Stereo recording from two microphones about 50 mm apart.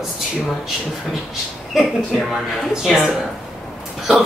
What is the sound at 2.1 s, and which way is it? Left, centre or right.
Speech, centre.